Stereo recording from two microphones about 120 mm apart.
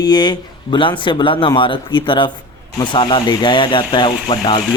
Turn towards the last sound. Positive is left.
turn(degrees=45)  # may be behind; listen again after turning